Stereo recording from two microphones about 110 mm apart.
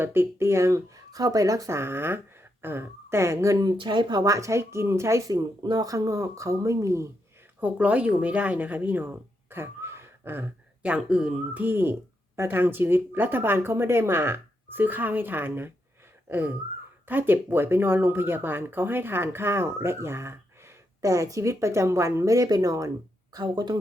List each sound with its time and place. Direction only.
0.0 s speech: 20° right (ahead or behind)
7.6 s speech: 10° right (ahead or behind)
16.3 s a sound: 20° right (ahead or behind)
17.1 s speech: 20° right (ahead or behind); by 23.7 s 40° right (ahead or behind)